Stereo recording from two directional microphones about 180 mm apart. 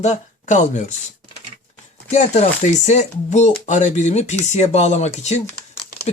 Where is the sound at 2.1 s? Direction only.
40° left (ahead or behind).